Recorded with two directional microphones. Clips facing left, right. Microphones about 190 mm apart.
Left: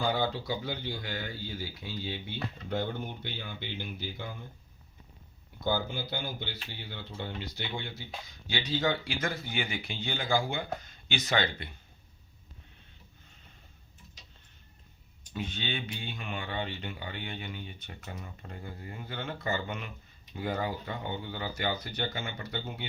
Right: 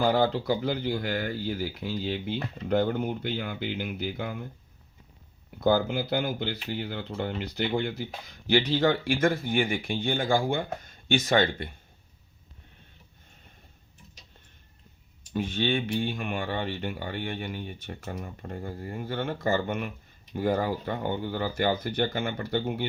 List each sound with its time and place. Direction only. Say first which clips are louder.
0.0 s speech: right 6 dB; 60° right (ahead or behind)
5.6 s speech: right 8 dB; 60° right (ahead or behind)
15.3 s speech: right 9 dB; 50° right (ahead or behind)